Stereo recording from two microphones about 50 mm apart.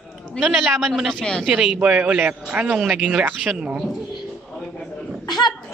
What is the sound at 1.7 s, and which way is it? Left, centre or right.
A man's voice, right.